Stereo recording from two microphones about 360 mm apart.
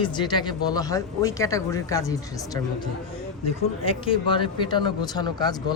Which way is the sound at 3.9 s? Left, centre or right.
Centre.